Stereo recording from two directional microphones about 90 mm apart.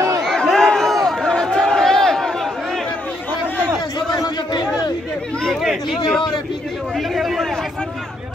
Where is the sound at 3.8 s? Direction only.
50° left (ahead or behind).